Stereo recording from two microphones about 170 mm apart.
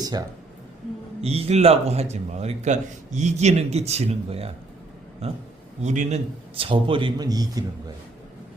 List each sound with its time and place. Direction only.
0.0 s speech: 25° right (ahead or behind)
1.2 s a man's voice: 35° right (ahead or behind)
5.8 s a man's voice: 45° right (ahead or behind)
6.6 s a man's voice: 30° right (ahead or behind)